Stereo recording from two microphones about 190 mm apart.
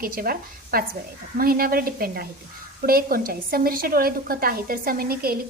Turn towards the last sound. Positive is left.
turn(degrees=-50)  # may be behind; listen again after turning